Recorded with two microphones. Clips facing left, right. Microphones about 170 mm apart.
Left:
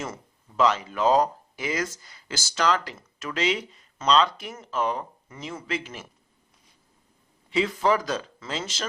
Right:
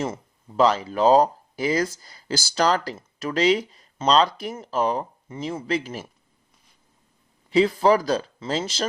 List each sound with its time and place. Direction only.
0.0 s speech: 30° right (ahead or behind)
7.5 s speech: 35° right (ahead or behind)